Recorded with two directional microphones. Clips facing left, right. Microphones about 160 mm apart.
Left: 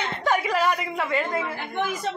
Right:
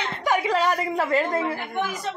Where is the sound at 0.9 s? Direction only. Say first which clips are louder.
Right 3 dB; 40° right (ahead or behind).